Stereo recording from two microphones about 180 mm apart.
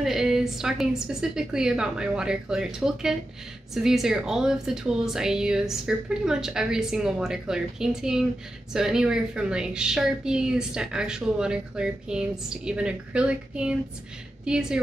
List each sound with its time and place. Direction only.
0.0 s a woman's voice: centre (ahead or behind)